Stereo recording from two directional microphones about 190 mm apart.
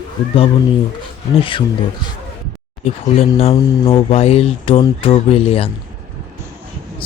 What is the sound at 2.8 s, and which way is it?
Speech, 30° left (ahead or behind).